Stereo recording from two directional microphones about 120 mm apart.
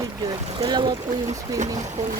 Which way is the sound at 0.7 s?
40° right (ahead or behind).